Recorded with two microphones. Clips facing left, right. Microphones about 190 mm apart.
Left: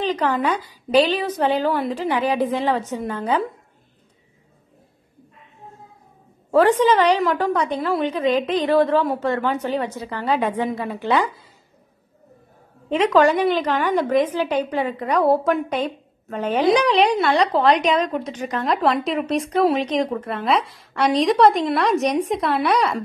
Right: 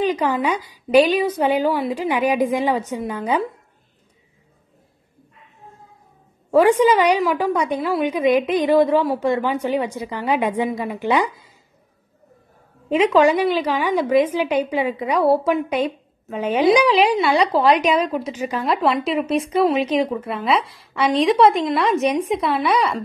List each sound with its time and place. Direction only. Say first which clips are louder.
0.0 s a woman's voice: right 1 dB; 10° right (ahead or behind)
6.5 s a woman's voice: right 1 dB; 10° right (ahead or behind)
12.9 s a woman's voice: right 1 dB; 10° right (ahead or behind)